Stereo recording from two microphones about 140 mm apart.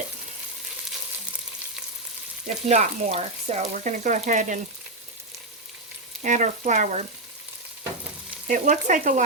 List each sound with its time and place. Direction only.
2.6 s speech: 50° right (ahead or behind)
6.2 s speech: 60° right (ahead or behind)
8.4 s speech: 65° right (ahead or behind)